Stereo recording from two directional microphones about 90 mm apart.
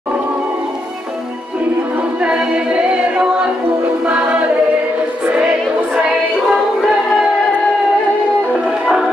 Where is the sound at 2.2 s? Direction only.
10° right (ahead or behind).